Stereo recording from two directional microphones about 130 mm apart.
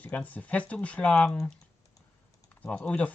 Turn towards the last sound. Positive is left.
turn(degrees=10)  # may be behind; listen again after turning